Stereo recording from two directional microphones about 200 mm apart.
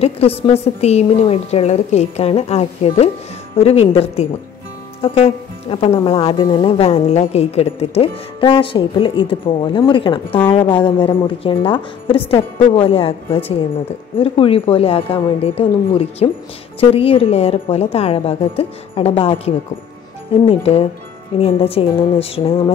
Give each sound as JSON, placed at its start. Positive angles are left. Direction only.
{"t": 0.0, "sound": "a woman's voice", "side_deg": 30}